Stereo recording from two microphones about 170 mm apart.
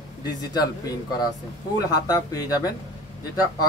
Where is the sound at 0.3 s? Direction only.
25° left (ahead or behind).